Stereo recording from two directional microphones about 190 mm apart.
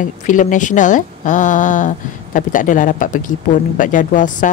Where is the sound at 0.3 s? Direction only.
40° left (ahead or behind).